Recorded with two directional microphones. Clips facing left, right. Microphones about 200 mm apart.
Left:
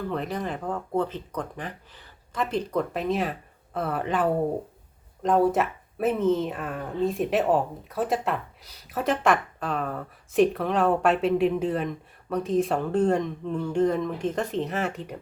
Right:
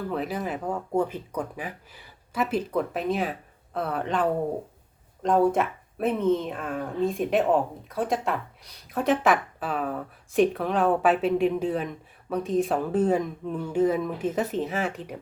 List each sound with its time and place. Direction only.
0.1 s speech: 5° right (ahead or behind)